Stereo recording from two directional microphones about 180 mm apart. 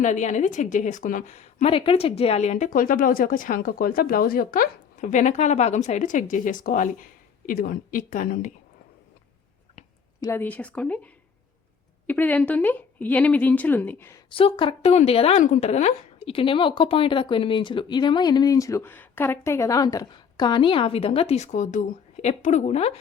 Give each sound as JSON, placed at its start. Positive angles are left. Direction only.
{"t": 0.0, "sound": "a woman's voice", "side_deg": 40}
{"t": 10.2, "sound": "a woman's voice", "side_deg": 15}
{"t": 14.3, "sound": "a woman's voice", "side_deg": 30}